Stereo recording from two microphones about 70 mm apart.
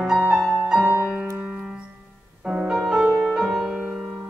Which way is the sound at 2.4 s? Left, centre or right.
Centre.